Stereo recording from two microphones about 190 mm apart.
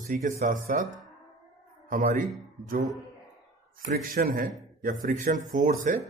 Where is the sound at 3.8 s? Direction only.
45° right (ahead or behind).